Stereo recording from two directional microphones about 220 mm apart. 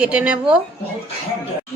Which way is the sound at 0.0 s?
5° right (ahead or behind).